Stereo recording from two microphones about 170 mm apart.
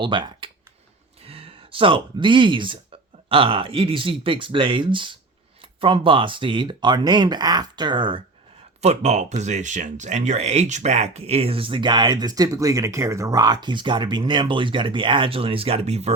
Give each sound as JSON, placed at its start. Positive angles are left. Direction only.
{"t": 0.0, "sound": "speech", "side_deg": -30}
{"t": 8.8, "sound": "speech", "side_deg": -40}